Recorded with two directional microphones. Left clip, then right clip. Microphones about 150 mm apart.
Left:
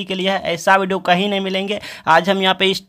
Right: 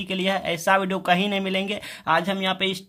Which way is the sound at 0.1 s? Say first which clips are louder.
Left 5 dB; 20° left (ahead or behind).